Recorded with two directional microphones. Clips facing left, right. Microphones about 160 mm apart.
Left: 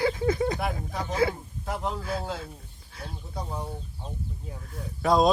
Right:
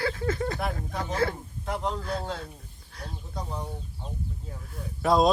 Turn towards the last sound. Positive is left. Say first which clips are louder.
# even
turn(degrees=0)  # may be behind; listen again after turning